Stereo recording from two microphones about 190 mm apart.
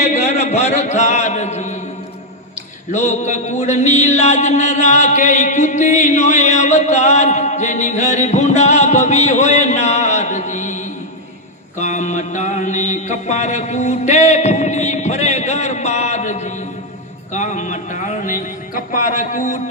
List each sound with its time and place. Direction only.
0.0 s speech: 35° left (ahead or behind)
2.9 s a sound: 40° left (ahead or behind)
11.8 s mantra: 40° left (ahead or behind)
17.3 s speech: 40° left (ahead or behind)